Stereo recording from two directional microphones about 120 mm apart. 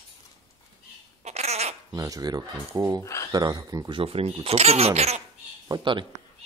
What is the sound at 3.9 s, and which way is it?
Speech, 50° right (ahead or behind).